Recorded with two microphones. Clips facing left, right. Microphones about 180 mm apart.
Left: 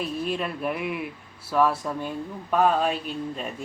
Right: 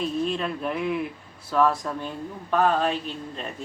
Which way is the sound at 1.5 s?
10° left (ahead or behind).